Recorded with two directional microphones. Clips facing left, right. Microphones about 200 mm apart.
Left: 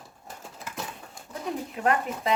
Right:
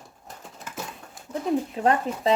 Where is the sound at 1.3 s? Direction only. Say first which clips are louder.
Right 7 dB; 30° right (ahead or behind).